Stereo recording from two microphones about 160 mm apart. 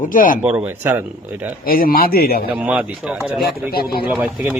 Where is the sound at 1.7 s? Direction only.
65° left (ahead or behind).